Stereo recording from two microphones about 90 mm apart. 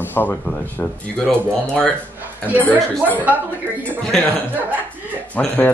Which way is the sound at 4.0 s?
10° left (ahead or behind).